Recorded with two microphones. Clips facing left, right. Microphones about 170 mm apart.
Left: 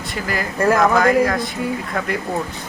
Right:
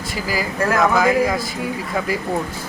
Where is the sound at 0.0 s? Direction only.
5° right (ahead or behind).